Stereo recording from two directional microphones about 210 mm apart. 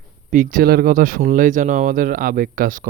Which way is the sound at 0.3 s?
35° right (ahead or behind).